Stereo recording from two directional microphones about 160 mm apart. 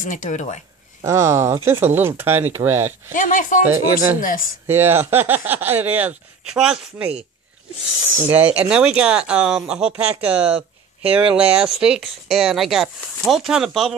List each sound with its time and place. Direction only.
0.0 s speech: 50° left (ahead or behind)
1.0 s speech: 20° right (ahead or behind)
3.1 s speech: 55° left (ahead or behind)
3.6 s speech: 10° right (ahead or behind)
4.2 s speech: 55° left (ahead or behind)
4.6 s speech: 15° right (ahead or behind)
8.3 s speech: 10° right (ahead or behind)